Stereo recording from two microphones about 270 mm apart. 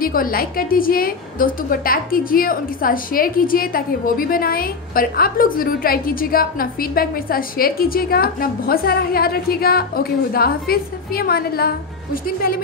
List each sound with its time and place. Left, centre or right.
0.0 s a woman's voice: left